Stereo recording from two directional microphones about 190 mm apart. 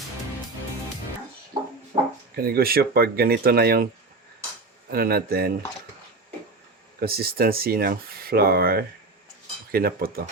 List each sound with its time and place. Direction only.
1.9 s a sound: 35° right (ahead or behind)
2.3 s speech: 55° right (ahead or behind)
4.9 s speech: 55° right (ahead or behind)
7.0 s speech: 55° right (ahead or behind)